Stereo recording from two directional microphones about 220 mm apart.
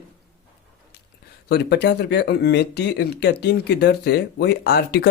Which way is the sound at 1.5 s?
50° left (ahead or behind).